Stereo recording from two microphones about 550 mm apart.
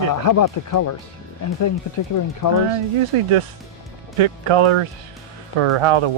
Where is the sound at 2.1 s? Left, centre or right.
Left.